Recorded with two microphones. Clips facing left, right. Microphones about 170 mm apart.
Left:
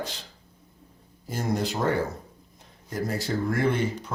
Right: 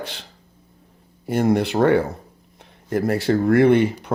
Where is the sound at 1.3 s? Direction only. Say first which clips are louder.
Right 9 dB; 65° right (ahead or behind).